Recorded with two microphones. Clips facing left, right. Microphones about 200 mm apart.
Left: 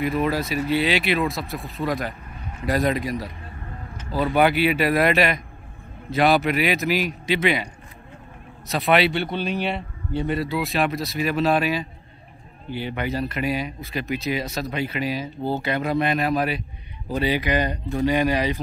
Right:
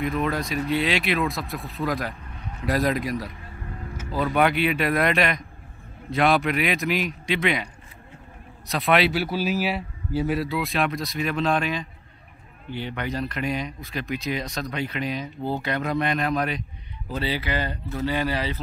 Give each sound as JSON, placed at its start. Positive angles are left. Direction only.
{"t": 0.0, "sound": "a man's voice", "side_deg": 5}
{"t": 8.6, "sound": "a man's voice", "side_deg": 0}